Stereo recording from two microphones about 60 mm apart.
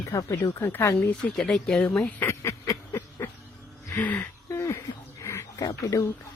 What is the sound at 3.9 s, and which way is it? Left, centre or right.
Speech, left.